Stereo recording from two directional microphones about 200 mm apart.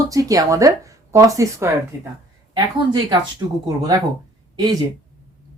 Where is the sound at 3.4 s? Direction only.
20° right (ahead or behind).